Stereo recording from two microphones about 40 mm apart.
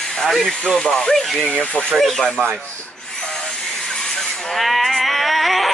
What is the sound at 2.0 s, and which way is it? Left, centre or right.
Speech, centre.